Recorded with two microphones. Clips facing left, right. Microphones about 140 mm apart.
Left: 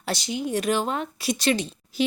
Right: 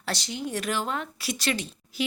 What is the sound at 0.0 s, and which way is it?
A woman's voice, 15° left (ahead or behind).